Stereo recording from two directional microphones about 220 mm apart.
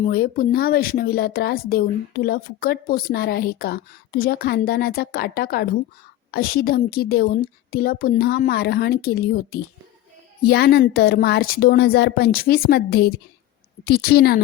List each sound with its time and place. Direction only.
0.0 s speech: 40° left (ahead or behind)